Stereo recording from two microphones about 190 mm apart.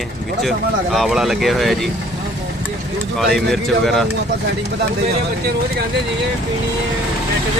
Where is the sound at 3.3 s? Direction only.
Centre (ahead or behind).